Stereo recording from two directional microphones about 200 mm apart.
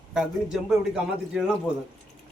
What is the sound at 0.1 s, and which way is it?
A man's voice, 5° right (ahead or behind).